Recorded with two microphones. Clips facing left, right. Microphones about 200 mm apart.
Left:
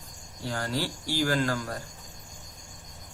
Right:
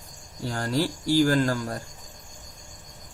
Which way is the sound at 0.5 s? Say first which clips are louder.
Right 5 dB; 40° right (ahead or behind).